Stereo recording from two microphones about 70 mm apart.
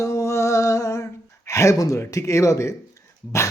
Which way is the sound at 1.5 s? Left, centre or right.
Left.